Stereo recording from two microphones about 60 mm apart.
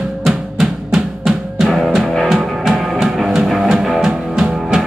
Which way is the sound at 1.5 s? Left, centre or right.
Centre.